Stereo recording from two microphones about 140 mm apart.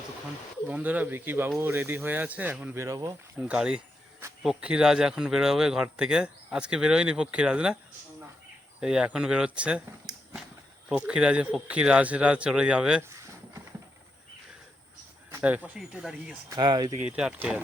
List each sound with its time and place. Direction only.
0.7 s speech: 10° right (ahead or behind)
3.4 s speech: 5° right (ahead or behind)
8.8 s speech: 5° right (ahead or behind)
10.8 s speech: 5° right (ahead or behind)
13.0 s a sound: 20° right (ahead or behind)
15.3 s speech: 10° right (ahead or behind)
16.5 s speech: 30° right (ahead or behind)
17.0 s speech: 5° right (ahead or behind)